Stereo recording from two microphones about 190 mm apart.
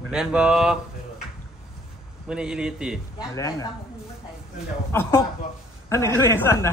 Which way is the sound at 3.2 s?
15° left (ahead or behind).